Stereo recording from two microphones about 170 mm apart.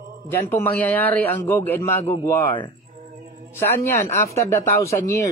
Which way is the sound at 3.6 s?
15° left (ahead or behind).